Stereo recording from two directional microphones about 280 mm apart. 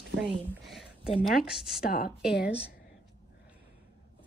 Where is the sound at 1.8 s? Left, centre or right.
Left.